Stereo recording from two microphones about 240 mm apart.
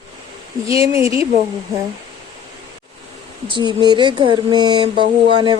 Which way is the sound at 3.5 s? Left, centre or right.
Centre.